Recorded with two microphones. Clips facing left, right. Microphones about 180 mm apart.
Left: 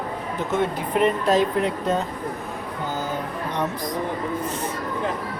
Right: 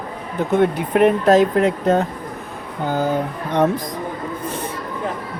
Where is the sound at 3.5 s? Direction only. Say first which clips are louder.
Right 10 dB; 50° right (ahead or behind).